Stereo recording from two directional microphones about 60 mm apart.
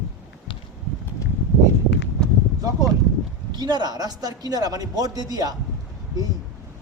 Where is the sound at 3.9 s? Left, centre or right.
Right.